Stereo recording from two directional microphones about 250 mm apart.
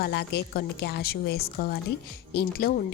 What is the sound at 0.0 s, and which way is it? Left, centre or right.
A woman's voice, left.